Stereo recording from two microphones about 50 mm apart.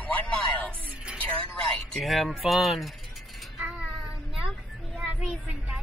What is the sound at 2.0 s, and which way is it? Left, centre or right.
Speech, centre.